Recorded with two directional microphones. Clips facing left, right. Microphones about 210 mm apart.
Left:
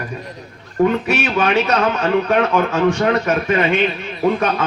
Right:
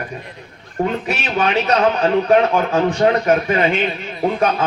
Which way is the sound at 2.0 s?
35° right (ahead or behind).